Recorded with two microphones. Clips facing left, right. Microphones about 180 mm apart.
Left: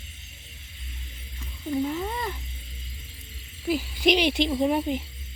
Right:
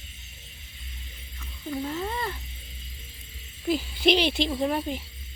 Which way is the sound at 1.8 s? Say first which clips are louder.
Left 2 dB; 5° left (ahead or behind).